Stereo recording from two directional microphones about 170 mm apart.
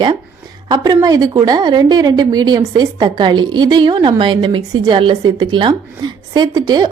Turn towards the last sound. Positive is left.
turn(degrees=-25)  # may be behind; listen again after turning